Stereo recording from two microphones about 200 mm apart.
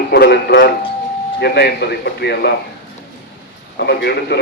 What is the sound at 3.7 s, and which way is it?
Speech, 55° left (ahead or behind).